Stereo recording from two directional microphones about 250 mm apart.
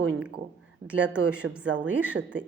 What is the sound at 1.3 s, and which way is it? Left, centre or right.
Speech, centre.